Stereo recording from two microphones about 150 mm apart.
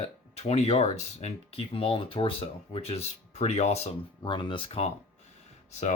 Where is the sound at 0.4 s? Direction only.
45° left (ahead or behind).